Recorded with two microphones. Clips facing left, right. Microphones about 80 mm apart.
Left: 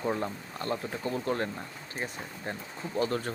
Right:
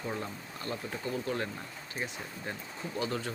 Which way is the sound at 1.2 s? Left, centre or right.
Left.